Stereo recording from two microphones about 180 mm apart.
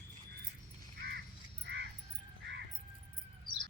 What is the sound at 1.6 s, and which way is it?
Crow, 65° right (ahead or behind).